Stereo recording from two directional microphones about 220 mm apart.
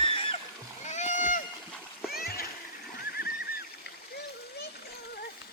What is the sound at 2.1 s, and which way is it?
Splash, 45° left (ahead or behind).